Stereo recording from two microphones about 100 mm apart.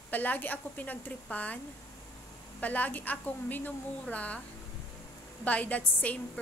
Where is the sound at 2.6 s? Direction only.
15° left (ahead or behind).